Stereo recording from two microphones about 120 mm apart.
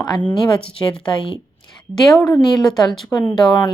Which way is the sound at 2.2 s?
35° left (ahead or behind).